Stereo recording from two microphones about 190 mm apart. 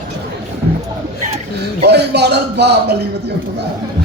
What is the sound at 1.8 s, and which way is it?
Speech, 60° right (ahead or behind).